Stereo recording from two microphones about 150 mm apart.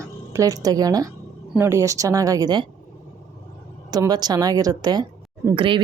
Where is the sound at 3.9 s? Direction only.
25° right (ahead or behind).